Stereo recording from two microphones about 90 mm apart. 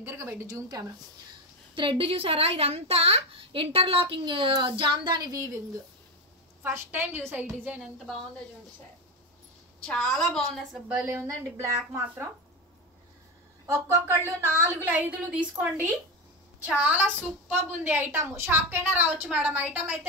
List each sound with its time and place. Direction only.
0.0 s speech: 30° right (ahead or behind)
1.8 s a child's voice: 70° right (ahead or behind); by 5.3 s 55° right (ahead or behind)
5.3 s speech: 35° right (ahead or behind)
6.6 s a woman's voice: 25° right (ahead or behind)
9.8 s a woman's voice: 5° left (ahead or behind)
11.2 s a woman's voice: 30° right (ahead or behind)
13.7 s a woman's voice: 30° right (ahead or behind)